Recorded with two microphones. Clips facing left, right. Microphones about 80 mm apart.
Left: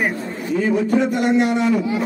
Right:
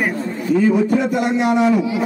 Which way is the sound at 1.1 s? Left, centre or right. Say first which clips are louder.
Even; centre.